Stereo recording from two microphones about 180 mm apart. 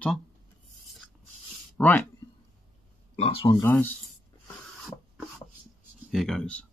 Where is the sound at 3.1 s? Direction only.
30° left (ahead or behind).